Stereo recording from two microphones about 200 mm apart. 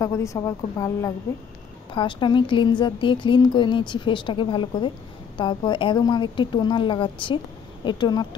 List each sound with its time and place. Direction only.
0.0 s a woman's voice: 15° left (ahead or behind)